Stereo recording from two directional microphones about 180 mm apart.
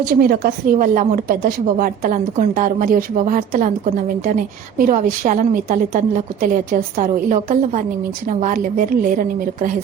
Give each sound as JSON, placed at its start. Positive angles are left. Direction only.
{"t": 0.2, "sound": "a woman's voice", "side_deg": -55}